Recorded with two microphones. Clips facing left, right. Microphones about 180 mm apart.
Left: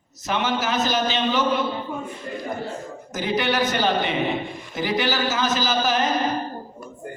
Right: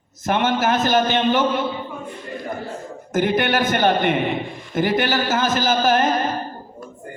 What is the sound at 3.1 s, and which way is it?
A man's voice, 55° right (ahead or behind).